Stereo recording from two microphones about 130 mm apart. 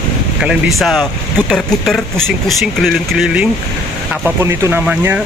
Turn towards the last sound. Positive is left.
turn(degrees=-15)  # may be behind; listen again after turning